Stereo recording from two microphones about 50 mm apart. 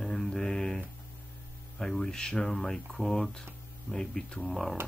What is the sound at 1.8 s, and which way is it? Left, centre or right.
Speech, centre.